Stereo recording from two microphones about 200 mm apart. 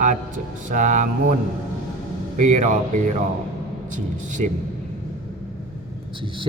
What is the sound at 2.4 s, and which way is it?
A man's voice, 40° right (ahead or behind).